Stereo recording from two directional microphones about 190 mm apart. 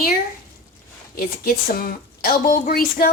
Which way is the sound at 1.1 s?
50° left (ahead or behind).